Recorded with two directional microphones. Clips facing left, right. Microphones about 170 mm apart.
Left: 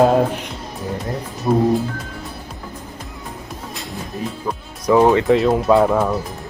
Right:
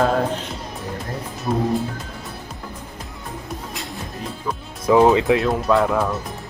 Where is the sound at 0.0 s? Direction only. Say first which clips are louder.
Left 5 dB; 15° left (ahead or behind).